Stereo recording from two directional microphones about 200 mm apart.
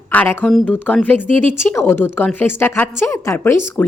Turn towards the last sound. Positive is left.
turn(degrees=10)  # may be behind; listen again after turning